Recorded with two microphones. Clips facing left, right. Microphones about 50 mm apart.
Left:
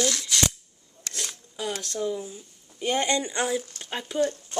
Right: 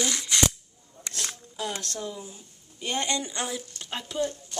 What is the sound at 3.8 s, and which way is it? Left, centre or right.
Speech, centre.